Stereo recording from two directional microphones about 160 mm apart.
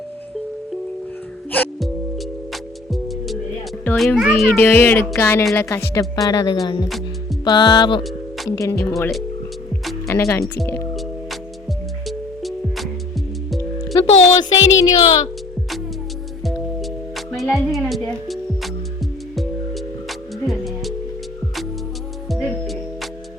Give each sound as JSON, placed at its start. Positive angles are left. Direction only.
{"t": 2.5, "sound": "music", "side_deg": 0}
{"t": 3.9, "sound": "a child's voice", "side_deg": 0}
{"t": 4.5, "sound": "speech", "side_deg": 15}
{"t": 10.1, "sound": "speech", "side_deg": 20}
{"t": 12.0, "sound": "music", "side_deg": 0}
{"t": 14.0, "sound": "speech", "side_deg": 40}
{"t": 14.5, "sound": "speech", "side_deg": 25}
{"t": 16.4, "sound": "music", "side_deg": 0}
{"t": 19.4, "sound": "music", "side_deg": 0}
{"t": 22.3, "sound": "music", "side_deg": 0}